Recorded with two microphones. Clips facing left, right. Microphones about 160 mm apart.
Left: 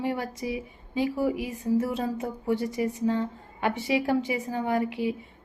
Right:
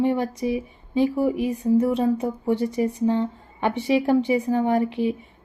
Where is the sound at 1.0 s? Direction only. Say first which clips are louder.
Right 5 dB; 25° right (ahead or behind).